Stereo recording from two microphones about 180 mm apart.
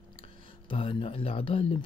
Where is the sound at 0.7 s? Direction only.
30° left (ahead or behind).